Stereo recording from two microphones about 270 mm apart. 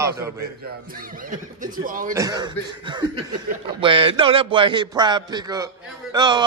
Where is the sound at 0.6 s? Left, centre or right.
Right.